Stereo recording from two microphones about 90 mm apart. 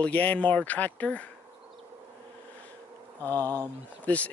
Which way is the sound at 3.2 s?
20° left (ahead or behind).